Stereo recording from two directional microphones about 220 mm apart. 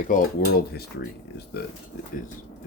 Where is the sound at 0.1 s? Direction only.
40° left (ahead or behind).